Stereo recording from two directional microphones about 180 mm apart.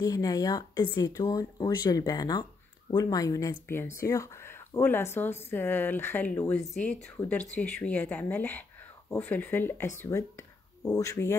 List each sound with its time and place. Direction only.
0.0 s speech: 20° left (ahead or behind)